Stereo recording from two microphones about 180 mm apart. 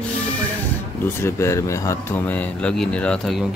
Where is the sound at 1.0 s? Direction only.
15° left (ahead or behind).